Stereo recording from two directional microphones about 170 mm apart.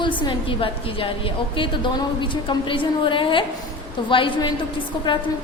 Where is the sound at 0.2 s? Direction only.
30° left (ahead or behind).